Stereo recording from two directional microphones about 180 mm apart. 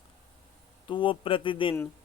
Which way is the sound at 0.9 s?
25° left (ahead or behind).